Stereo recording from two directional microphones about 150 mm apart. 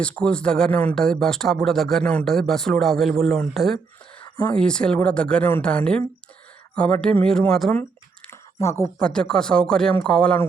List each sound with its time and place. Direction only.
0.0 s speech: 5° left (ahead or behind)
8.3 s a sound: 20° left (ahead or behind)
9.0 s speech: 5° left (ahead or behind)